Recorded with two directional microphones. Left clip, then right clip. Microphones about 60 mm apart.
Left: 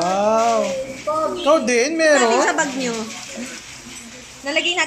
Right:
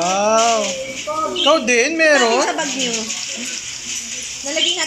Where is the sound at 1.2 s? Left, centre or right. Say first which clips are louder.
Right 2 dB; centre.